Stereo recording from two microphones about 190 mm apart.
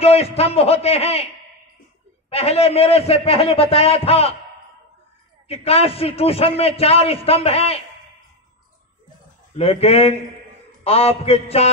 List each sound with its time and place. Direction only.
0.0 s a man's voice: 30° left (ahead or behind)
5.5 s a man's voice: 30° left (ahead or behind)
9.6 s a man's voice: 30° left (ahead or behind)